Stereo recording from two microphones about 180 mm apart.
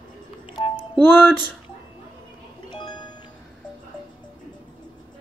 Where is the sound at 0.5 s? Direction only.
30° left (ahead or behind).